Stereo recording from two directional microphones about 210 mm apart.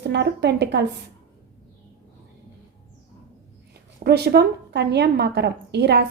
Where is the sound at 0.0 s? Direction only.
55° right (ahead or behind).